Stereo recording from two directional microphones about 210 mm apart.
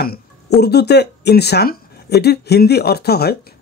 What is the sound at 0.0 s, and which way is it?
Speech, 50° left (ahead or behind).